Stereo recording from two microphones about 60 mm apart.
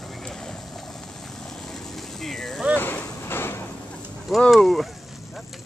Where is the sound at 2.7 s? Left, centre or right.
Left.